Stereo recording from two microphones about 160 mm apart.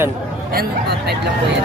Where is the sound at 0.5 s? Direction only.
80° right.